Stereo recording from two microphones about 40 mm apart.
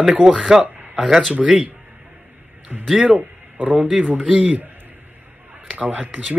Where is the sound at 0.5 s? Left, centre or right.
Centre.